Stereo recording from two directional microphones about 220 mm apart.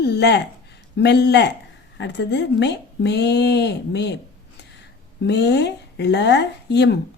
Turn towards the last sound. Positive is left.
turn(degrees=50)  # may be behind; listen again after turning